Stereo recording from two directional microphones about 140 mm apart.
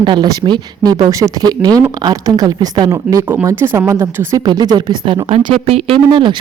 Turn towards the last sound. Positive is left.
turn(degrees=-35)  # may be behind; listen again after turning